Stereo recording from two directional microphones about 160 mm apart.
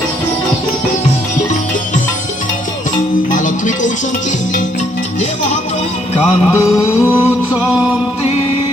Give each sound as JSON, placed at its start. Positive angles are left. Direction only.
{"t": 3.3, "sound": "music", "side_deg": 55}
{"t": 6.2, "sound": "music", "side_deg": -5}
{"t": 6.8, "sound": "a sound", "side_deg": 15}
{"t": 7.5, "sound": "music", "side_deg": -10}